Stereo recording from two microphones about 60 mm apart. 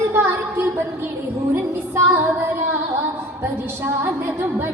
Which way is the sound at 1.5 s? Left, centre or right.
Right.